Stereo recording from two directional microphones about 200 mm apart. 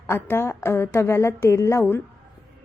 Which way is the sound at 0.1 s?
10° left (ahead or behind).